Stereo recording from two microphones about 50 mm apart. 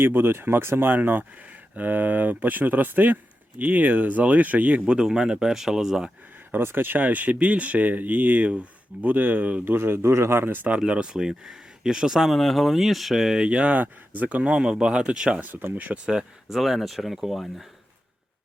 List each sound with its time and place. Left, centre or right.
0.0 s speech: right
4.9 s speech: centre
6.5 s speech: right
7.0 s speech: right
9.6 s speech: right
10.5 s speech: right
10.8 s speech: centre
12.3 s speech: centre
15.4 s speech: right
16.0 s speech: centre
16.6 s speech: centre